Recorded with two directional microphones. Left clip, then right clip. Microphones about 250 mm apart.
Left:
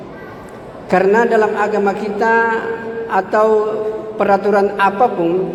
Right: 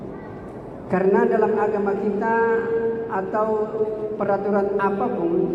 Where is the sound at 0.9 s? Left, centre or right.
Left.